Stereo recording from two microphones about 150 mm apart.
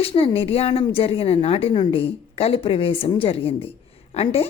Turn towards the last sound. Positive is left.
turn(degrees=40)  # may be behind; listen again after turning